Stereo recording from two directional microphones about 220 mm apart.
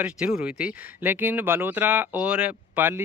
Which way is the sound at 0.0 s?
5° right (ahead or behind).